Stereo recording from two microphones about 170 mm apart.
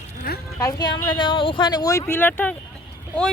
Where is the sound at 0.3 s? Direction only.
65° left (ahead or behind).